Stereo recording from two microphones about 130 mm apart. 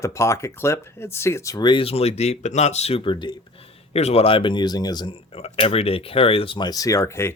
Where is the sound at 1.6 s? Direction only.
45° left (ahead or behind).